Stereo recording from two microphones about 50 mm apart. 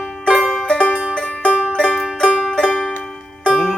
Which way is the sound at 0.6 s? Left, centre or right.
Left.